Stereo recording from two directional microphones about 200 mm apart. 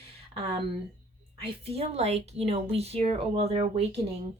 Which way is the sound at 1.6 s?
30° right (ahead or behind).